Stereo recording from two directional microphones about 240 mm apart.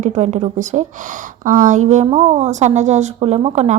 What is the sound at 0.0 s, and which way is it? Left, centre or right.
A woman's voice, right.